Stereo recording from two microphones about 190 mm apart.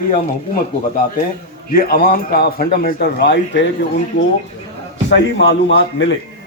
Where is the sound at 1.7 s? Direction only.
50° left (ahead or behind).